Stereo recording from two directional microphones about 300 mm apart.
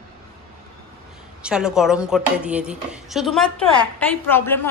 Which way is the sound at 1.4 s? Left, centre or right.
Centre.